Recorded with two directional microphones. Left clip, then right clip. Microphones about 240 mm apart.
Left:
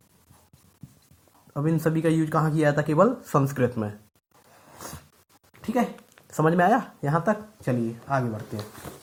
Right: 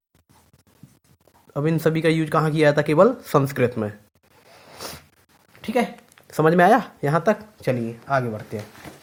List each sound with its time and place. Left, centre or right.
1.5 s speech: right
3.5 s speech: right
4.5 s a sound: right
6.2 s speech: right